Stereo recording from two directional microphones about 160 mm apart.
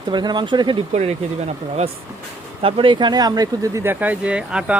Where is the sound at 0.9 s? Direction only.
40° right (ahead or behind).